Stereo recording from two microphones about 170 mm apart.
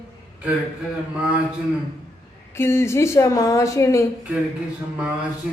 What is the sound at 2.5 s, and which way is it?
A woman's voice, 15° left (ahead or behind).